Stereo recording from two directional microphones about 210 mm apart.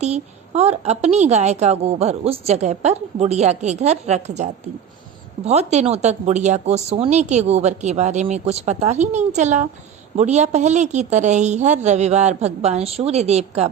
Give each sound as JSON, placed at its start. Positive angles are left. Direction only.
{"t": 0.0, "sound": "a woman's voice", "side_deg": -30}